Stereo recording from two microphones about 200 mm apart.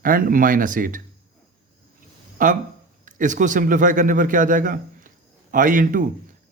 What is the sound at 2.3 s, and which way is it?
A man's voice, 40° right (ahead or behind).